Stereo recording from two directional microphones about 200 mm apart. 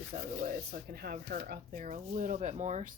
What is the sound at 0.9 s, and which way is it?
Speech, 50° right (ahead or behind).